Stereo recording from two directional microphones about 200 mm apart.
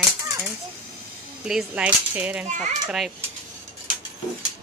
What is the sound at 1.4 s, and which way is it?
A woman's voice, 5° right (ahead or behind).